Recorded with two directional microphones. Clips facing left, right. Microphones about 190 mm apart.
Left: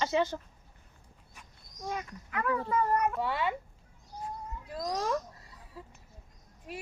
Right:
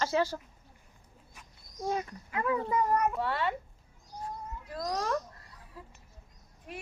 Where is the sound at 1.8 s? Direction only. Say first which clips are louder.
Right 5 dB; 30° right (ahead or behind); by 3.5 s centre (ahead or behind).